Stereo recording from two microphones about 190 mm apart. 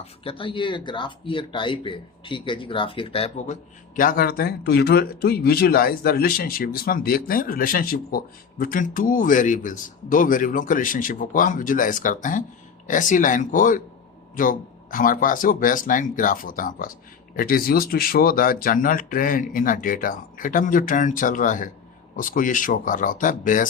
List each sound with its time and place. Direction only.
0.0 s speech: 30° left (ahead or behind); by 23.6 s 45° left (ahead or behind)